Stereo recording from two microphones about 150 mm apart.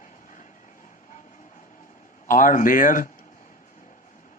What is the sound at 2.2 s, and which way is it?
Speech, 65° left (ahead or behind).